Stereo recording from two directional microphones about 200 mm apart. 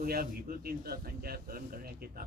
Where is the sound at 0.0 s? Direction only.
50° right (ahead or behind).